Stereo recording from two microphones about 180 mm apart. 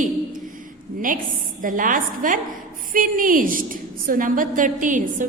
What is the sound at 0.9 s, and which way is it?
A woman's voice, 50° right (ahead or behind).